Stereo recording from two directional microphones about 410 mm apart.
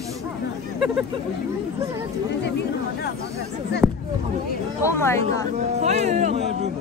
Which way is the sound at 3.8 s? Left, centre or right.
Centre.